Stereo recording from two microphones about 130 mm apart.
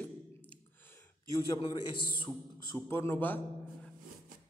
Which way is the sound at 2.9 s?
20° left (ahead or behind).